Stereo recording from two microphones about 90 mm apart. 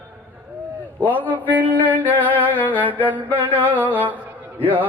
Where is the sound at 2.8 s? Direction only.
20° right (ahead or behind).